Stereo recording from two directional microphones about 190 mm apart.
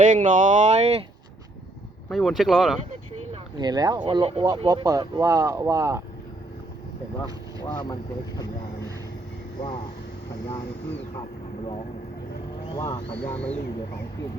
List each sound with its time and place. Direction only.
0.0 s speech: 40° right (ahead or behind)
2.0 s speech: centre (ahead or behind)
3.6 s speech: 20° right (ahead or behind)
7.6 s speech: 20° left (ahead or behind)
9.6 s speech: 25° left (ahead or behind)
12.7 s speech: 25° left (ahead or behind)
13.2 s speech: 10° left (ahead or behind)